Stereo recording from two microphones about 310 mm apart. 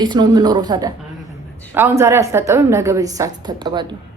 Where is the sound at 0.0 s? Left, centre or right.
Centre.